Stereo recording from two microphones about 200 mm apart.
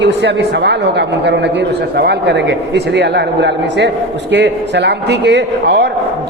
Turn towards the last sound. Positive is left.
turn(degrees=-60)  # may be behind; listen again after turning